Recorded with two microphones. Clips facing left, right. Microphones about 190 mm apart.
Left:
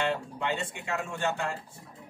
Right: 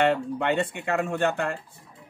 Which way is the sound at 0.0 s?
60° right (ahead or behind).